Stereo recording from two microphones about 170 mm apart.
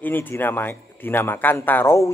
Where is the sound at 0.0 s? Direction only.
10° left (ahead or behind).